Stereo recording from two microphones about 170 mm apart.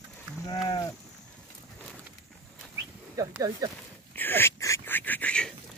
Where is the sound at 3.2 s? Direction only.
20° right (ahead or behind).